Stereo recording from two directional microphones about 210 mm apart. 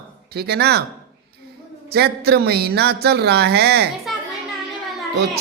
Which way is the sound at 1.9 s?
50° right (ahead or behind).